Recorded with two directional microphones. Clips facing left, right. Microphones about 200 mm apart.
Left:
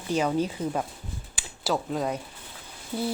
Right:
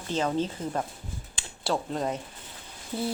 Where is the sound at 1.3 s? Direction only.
Centre (ahead or behind).